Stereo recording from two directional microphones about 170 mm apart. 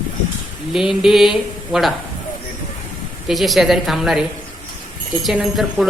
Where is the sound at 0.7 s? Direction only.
5° right (ahead or behind).